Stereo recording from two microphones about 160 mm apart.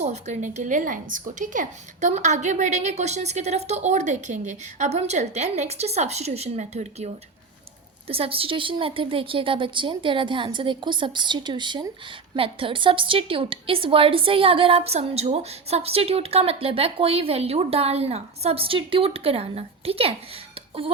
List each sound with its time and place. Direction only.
0.0 s a woman's voice: 45° right (ahead or behind)